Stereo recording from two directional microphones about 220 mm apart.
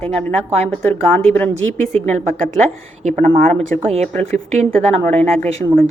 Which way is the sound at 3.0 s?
35° right (ahead or behind).